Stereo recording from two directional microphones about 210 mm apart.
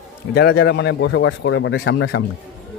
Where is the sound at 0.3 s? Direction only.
50° left (ahead or behind).